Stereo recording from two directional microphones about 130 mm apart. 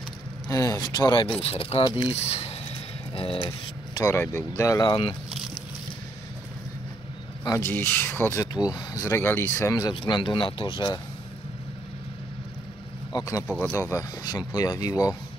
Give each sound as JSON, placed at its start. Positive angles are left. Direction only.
{"t": 0.5, "sound": "speech", "side_deg": 25}
{"t": 1.4, "sound": "speech", "side_deg": 50}
{"t": 1.9, "sound": "a man's voice", "side_deg": 35}
{"t": 2.1, "sound": "speech", "side_deg": 50}
{"t": 3.4, "sound": "speech", "side_deg": 25}
{"t": 4.8, "sound": "a man's voice", "side_deg": 40}
{"t": 7.4, "sound": "speech", "side_deg": 20}
{"t": 8.6, "sound": "a man's voice", "side_deg": 30}
{"t": 13.1, "sound": "a man's voice", "side_deg": 25}